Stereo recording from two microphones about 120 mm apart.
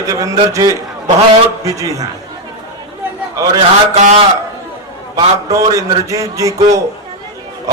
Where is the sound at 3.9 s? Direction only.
85° right.